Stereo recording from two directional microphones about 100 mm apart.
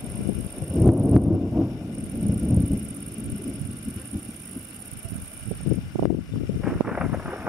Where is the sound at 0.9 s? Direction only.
15° right (ahead or behind).